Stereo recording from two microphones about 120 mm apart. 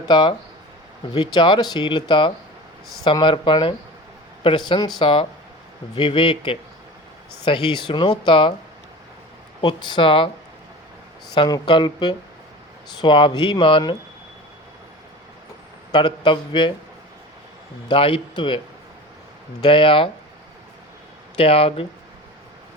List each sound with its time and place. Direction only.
0.1 s speech: 40° left (ahead or behind)
9.6 s speech: 40° left (ahead or behind)
11.3 s speech: 35° left (ahead or behind)
15.9 s speech: 40° left (ahead or behind)
17.8 s speech: 45° left (ahead or behind)
19.6 s speech: 45° left (ahead or behind)
21.3 s speech: 50° left (ahead or behind)